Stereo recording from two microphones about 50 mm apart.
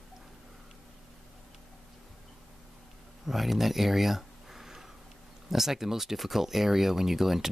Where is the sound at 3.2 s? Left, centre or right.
Centre.